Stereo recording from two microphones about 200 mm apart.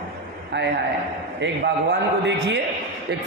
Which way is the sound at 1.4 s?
60° right (ahead or behind).